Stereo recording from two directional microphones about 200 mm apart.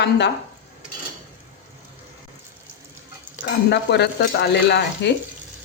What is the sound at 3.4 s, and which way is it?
Speech, 55° left (ahead or behind).